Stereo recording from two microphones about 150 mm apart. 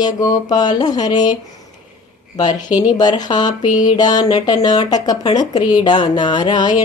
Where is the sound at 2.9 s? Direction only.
30° left (ahead or behind).